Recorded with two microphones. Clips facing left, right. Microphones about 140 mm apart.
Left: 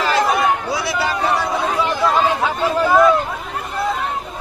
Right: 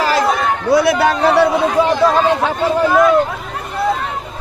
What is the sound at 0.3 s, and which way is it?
Chatter, 10° left (ahead or behind).